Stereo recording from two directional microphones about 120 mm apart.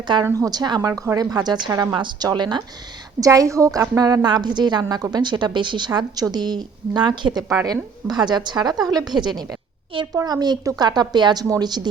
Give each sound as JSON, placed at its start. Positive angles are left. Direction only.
{"t": 0.3, "sound": "a woman's voice", "side_deg": -30}
{"t": 3.2, "sound": "a woman's voice", "side_deg": -25}